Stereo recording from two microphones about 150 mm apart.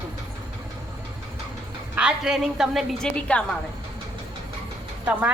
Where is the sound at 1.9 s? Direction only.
5° right (ahead or behind).